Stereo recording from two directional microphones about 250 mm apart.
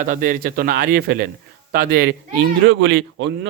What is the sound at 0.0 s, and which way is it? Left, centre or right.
A man's voice, right.